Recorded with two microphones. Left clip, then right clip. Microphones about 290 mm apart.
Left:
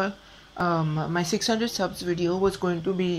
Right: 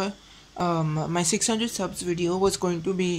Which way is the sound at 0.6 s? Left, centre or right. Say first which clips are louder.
Left 1 dB; centre.